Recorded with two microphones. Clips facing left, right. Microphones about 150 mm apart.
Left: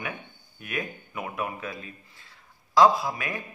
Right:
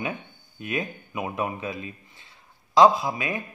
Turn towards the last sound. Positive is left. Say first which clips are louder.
# right 2 dB
turn(degrees=-20)  # may be behind; listen again after turning